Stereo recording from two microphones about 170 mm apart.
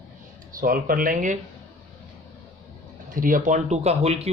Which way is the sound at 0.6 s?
55° right (ahead or behind).